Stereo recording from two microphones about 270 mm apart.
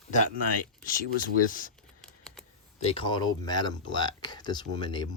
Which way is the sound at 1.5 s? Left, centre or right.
Left.